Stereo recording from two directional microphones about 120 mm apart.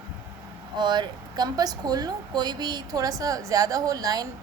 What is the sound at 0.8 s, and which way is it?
A woman's voice, 35° right (ahead or behind).